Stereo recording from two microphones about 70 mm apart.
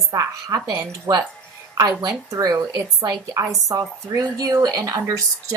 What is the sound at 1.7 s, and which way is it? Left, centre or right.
Speech, right.